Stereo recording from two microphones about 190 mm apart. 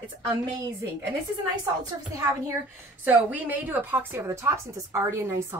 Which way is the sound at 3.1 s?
10° right (ahead or behind).